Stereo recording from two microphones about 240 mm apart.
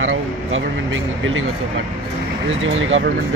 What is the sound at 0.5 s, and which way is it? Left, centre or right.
Speech, right.